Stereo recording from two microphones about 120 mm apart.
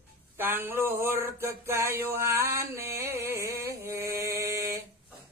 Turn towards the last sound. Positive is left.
turn(degrees=-25)  # may be behind; listen again after turning